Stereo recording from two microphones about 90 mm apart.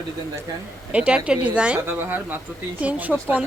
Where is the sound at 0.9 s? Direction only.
15° right (ahead or behind).